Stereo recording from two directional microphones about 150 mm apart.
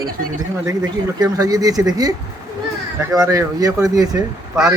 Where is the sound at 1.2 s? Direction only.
25° right (ahead or behind).